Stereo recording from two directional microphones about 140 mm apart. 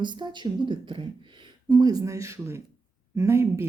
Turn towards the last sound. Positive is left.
turn(degrees=-15)  # may be behind; listen again after turning